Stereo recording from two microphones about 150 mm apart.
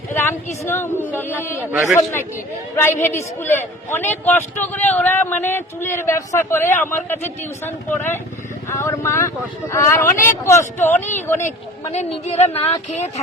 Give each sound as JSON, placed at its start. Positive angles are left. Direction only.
{"t": 0.1, "sound": "a sound", "side_deg": 15}
{"t": 0.6, "sound": "speech", "side_deg": 15}
{"t": 2.7, "sound": "speech", "side_deg": 15}
{"t": 11.9, "sound": "a woman's voice", "side_deg": 45}